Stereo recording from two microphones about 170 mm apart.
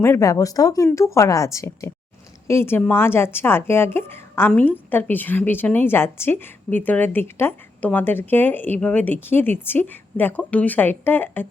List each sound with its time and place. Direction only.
0.0 s a woman's voice: 15° left (ahead or behind)